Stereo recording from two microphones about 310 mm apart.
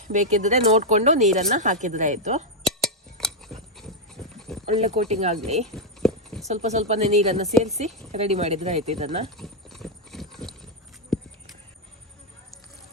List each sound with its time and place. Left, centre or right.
0.1 s speech: right
2.6 s a sound: centre
4.6 s speech: right
5.6 s a sound: centre
6.5 s speech: right
9.4 s clip-clop: centre